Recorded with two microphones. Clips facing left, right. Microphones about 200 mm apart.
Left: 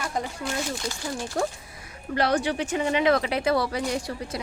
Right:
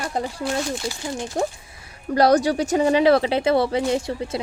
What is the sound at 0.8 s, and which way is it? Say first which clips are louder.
Speech: right 3 dB; 20° right (ahead or behind).